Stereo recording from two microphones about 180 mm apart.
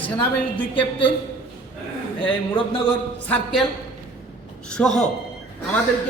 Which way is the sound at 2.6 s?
25° left (ahead or behind).